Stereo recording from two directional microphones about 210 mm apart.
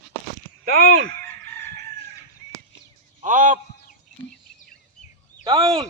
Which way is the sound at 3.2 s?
35° right (ahead or behind).